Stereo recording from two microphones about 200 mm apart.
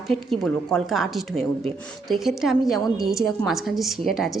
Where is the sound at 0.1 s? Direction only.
Centre (ahead or behind).